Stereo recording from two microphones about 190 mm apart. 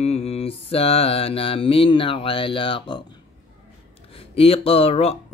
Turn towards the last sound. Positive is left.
turn(degrees=30)  # may be behind; listen again after turning